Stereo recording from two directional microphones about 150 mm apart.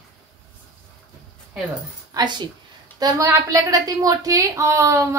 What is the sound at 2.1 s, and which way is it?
A woman's voice, 30° right (ahead or behind).